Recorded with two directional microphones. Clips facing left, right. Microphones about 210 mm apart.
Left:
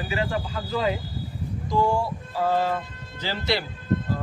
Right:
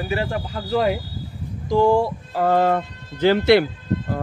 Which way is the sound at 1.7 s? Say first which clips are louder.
Right 7 dB; 90° right.